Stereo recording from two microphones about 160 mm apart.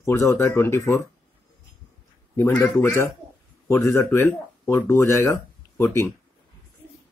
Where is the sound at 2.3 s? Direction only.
15° left (ahead or behind).